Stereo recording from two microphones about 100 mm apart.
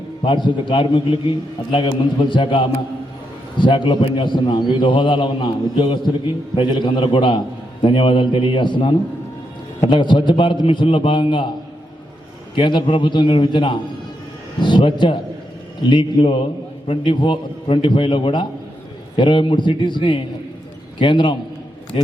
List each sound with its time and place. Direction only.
0.2 s a man's voice: 50° left (ahead or behind)
12.5 s a man's voice: 55° left (ahead or behind)
21.9 s a man's voice: 70° left (ahead or behind)